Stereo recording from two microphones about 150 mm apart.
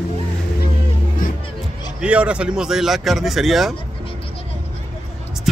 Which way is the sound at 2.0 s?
10° right (ahead or behind).